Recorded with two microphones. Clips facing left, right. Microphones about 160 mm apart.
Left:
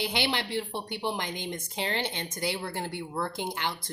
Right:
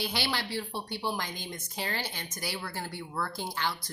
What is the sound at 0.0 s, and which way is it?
Speech, 20° left (ahead or behind).